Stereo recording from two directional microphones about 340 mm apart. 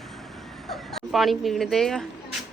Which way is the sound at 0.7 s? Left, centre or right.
Centre.